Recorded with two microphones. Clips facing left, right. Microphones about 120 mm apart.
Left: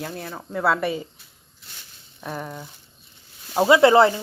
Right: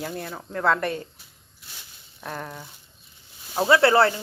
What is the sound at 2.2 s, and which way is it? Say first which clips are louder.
Speech: left 2 dB; 5° left (ahead or behind).